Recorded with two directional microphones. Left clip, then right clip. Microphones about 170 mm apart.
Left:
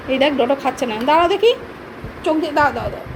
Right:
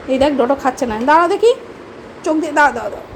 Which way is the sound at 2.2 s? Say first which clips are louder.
Right 1 dB; 65° right (ahead or behind).